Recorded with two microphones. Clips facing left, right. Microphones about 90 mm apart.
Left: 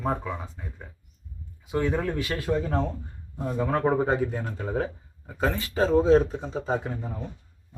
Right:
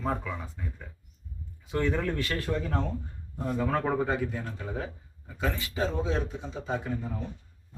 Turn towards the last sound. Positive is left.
turn(degrees=30)  # may be behind; listen again after turning